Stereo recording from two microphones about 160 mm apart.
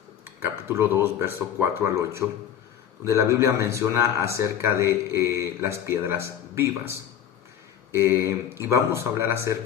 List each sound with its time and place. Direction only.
0.3 s speech: 15° right (ahead or behind)
7.9 s speech: 15° right (ahead or behind)